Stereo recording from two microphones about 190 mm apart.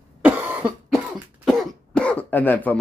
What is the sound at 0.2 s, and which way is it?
Cough, 10° right (ahead or behind).